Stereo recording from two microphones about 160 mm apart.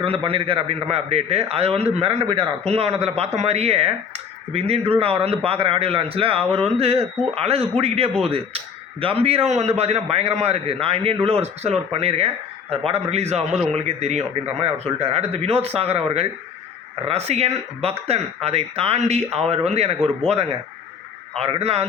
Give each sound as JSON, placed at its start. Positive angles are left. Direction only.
{"t": 0.0, "sound": "a man's voice", "side_deg": -35}